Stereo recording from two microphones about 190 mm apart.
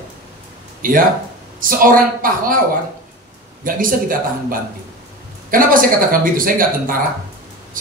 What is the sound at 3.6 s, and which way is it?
Speech, 45° right (ahead or behind).